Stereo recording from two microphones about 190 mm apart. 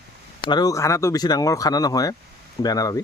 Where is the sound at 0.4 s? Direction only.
20° left (ahead or behind).